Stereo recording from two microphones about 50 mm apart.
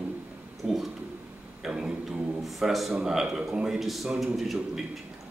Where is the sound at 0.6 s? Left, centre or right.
Centre.